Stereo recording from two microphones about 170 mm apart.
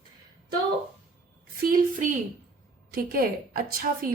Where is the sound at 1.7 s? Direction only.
50° right (ahead or behind).